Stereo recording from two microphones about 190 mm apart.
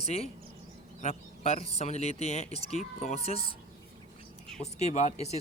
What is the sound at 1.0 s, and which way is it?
Speech, 35° left (ahead or behind).